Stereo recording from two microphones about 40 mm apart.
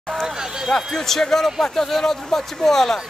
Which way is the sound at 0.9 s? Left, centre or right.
Centre.